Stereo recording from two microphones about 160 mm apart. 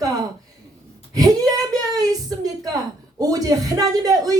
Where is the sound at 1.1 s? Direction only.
25° right (ahead or behind).